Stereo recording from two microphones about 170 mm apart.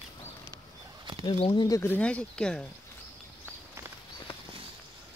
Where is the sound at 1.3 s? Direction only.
30° left (ahead or behind).